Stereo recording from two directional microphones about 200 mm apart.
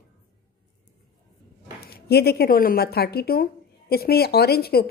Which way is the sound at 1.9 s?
50° left (ahead or behind).